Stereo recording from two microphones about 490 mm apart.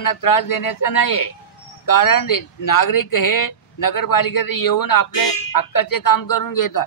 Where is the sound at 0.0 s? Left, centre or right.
Left.